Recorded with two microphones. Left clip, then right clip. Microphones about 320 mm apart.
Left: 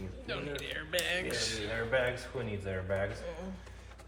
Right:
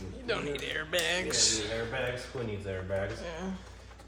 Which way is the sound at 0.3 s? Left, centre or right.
Right.